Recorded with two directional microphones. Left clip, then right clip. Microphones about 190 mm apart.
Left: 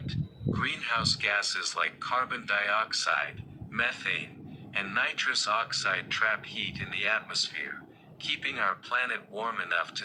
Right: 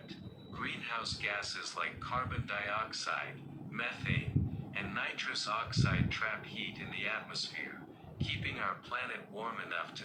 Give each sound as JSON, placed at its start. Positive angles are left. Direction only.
{"t": 0.1, "sound": "speech", "side_deg": 30}